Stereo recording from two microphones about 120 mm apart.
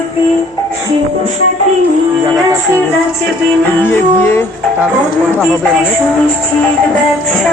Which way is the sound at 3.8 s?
20° left (ahead or behind).